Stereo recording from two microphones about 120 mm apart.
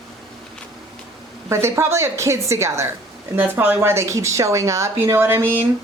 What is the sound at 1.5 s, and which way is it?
Speech, 20° right (ahead or behind).